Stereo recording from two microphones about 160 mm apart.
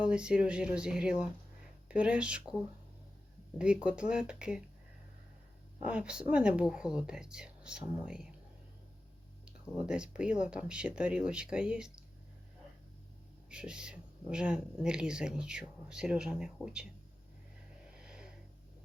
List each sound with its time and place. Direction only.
0.0 s speech: 5° right (ahead or behind)
3.6 s speech: 5° right (ahead or behind)
5.8 s speech: 5° right (ahead or behind)
9.6 s speech: 5° right (ahead or behind)
13.5 s speech: 5° right (ahead or behind)
17.8 s a sound: 5° right (ahead or behind)